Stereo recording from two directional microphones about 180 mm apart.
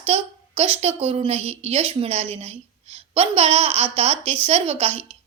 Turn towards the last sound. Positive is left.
turn(degrees=-35)  # may be behind; listen again after turning